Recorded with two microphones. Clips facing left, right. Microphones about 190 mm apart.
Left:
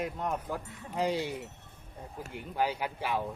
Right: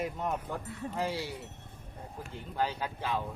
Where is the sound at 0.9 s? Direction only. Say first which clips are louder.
Left 4 dB; 20° left (ahead or behind).